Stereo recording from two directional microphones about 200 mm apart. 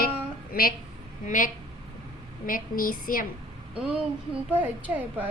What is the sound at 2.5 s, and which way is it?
Speech, 45° left (ahead or behind).